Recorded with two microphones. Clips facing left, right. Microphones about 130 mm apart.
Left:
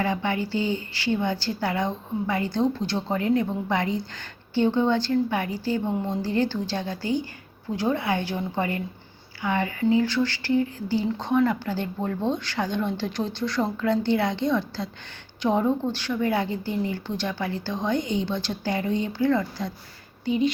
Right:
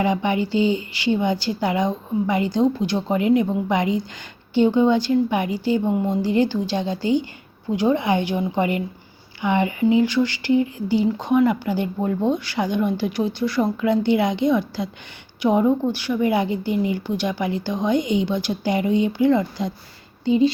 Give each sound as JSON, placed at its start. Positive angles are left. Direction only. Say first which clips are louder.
{"t": 0.0, "sound": "a woman's voice", "louder": "right 5 dB", "side_deg": -15}